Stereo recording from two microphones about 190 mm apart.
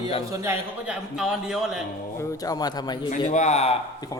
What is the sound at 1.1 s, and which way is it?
Speech, 5° right (ahead or behind).